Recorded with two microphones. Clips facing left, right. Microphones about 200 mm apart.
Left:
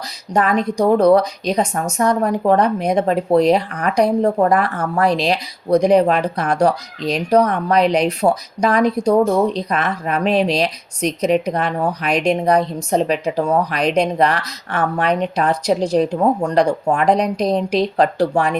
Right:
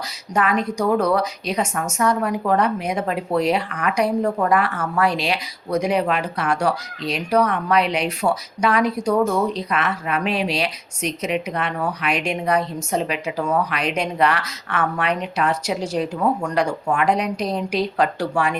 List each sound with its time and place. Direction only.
0.3 s a woman's voice: 35° left (ahead or behind)